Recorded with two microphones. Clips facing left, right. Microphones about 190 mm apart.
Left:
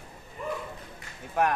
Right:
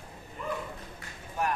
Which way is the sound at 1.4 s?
70° left (ahead or behind).